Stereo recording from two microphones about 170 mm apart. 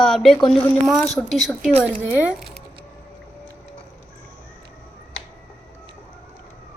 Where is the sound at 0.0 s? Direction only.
Centre (ahead or behind).